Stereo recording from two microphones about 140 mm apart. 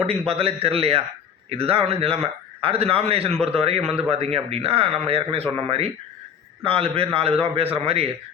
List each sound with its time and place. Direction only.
0.0 s a man's voice: 45° right (ahead or behind)
5.4 s speech: 10° left (ahead or behind)
5.6 s a man's voice: 45° right (ahead or behind)